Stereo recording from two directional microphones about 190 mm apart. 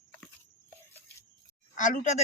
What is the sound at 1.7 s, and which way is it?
Speech, 40° left (ahead or behind).